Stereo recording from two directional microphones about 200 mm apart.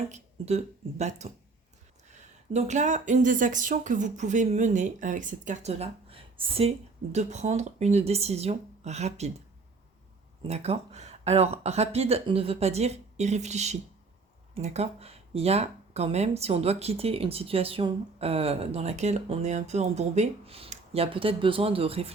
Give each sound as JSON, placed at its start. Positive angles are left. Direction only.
{"t": 0.1, "sound": "speech", "side_deg": -35}
{"t": 10.4, "sound": "speech", "side_deg": -30}